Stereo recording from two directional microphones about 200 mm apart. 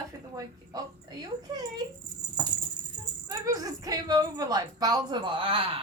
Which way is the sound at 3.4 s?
15° right (ahead or behind).